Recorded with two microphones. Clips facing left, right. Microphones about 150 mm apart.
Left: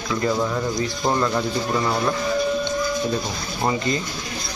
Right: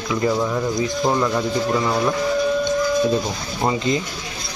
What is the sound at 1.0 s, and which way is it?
Speech, 5° right (ahead or behind).